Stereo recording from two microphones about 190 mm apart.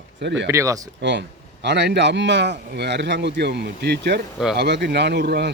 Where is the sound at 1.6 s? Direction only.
65° right (ahead or behind).